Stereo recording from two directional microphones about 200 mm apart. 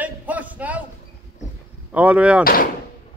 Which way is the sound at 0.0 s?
10° right (ahead or behind).